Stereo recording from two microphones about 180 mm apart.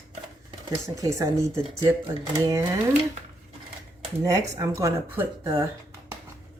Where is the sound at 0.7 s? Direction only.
15° right (ahead or behind).